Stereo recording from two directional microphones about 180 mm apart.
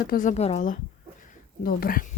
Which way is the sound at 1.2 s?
50° left (ahead or behind).